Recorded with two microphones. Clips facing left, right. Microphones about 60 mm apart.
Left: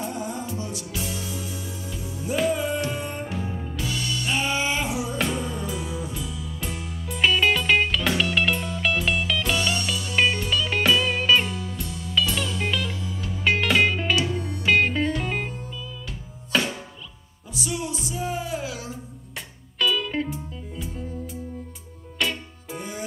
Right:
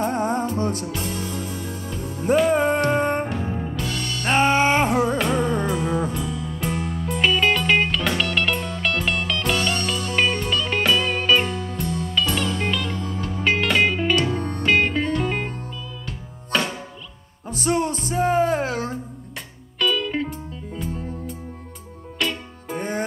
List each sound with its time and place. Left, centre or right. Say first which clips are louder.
0.0 s music: right 8 dB; right
3.8 s music: right 1 dB; centre
4.2 s music: right 9 dB; right
7.0 s music: even; centre
12.9 s music: right 5 dB; right
13.4 s music: right 1 dB; centre
14.3 s music: right 4 dB; right
14.6 s music: even; centre
16.5 s music: right 1 dB; centre
17.5 s music: right 8 dB; right
19.8 s music: right 2 dB; centre
22.2 s music: right 1 dB; centre
22.7 s music: right 8 dB; right